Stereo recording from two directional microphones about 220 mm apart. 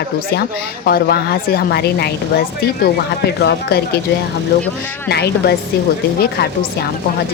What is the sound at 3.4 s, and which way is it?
Speech, 50° left (ahead or behind).